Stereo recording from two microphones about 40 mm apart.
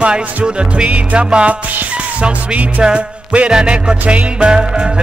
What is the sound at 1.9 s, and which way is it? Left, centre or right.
Speech, right.